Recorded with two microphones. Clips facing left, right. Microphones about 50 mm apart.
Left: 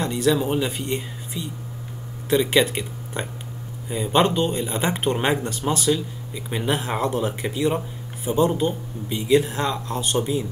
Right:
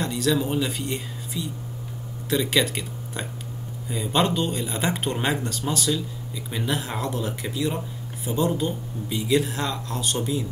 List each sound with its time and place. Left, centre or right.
0.0 s speech: centre